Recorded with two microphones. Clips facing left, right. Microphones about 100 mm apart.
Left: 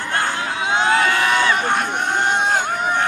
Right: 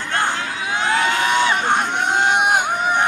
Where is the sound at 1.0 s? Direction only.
20° right (ahead or behind).